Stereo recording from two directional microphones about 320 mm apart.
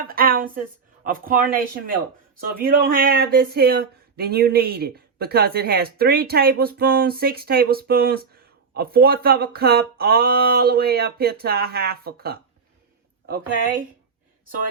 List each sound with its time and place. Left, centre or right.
0.0 s a sound: right
1.0 s speech: right
2.6 s speech: right